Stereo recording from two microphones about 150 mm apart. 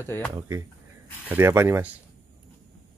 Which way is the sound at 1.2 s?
15° right (ahead or behind).